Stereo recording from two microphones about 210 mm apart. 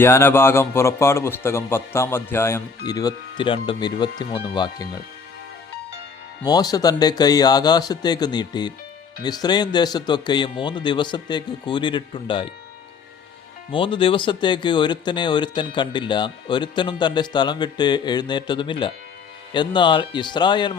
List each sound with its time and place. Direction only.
0.0 s a man's voice: 10° left (ahead or behind)
6.4 s speech: 20° left (ahead or behind)
13.7 s speech: 25° left (ahead or behind)